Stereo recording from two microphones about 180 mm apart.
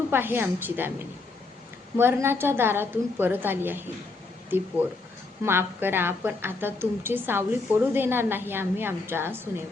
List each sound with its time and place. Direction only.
0.1 s a woman's voice: 10° right (ahead or behind)